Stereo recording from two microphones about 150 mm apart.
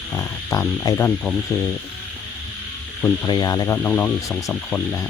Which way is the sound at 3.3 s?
25° left (ahead or behind).